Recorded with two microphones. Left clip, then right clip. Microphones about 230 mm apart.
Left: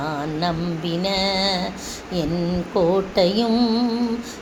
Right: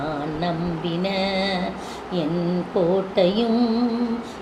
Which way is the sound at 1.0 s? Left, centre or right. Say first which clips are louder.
Left 3 dB; left.